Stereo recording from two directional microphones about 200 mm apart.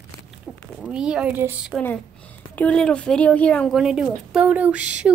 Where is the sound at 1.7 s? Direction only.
10° left (ahead or behind).